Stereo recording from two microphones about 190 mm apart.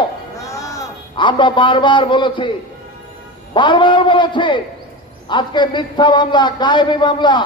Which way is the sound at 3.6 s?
25° left (ahead or behind).